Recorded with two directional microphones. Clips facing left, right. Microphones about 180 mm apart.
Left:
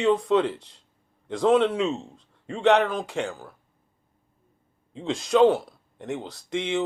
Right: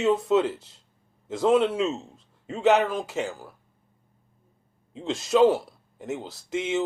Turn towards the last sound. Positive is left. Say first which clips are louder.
# even
turn(degrees=0)  # may be behind; listen again after turning